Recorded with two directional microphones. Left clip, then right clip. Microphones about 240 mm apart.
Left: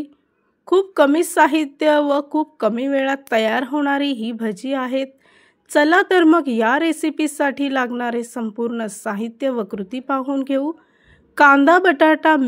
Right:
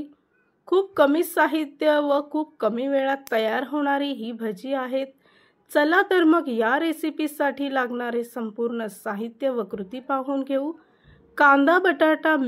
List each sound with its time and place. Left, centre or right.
0.7 s a woman's voice: left